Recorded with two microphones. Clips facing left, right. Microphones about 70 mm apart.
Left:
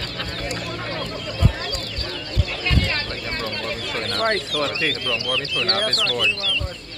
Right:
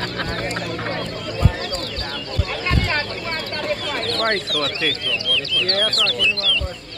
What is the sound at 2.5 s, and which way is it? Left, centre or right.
Chicken, right.